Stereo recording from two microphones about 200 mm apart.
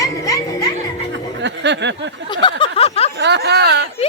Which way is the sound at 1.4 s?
60° right (ahead or behind).